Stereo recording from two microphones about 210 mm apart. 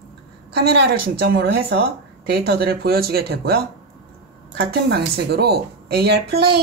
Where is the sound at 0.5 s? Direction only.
50° right (ahead or behind).